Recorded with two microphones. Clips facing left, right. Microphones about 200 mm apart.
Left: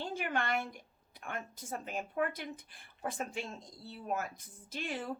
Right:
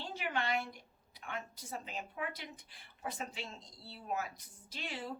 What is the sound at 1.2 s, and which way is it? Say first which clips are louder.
A woman's voice: left 2 dB; 50° left (ahead or behind).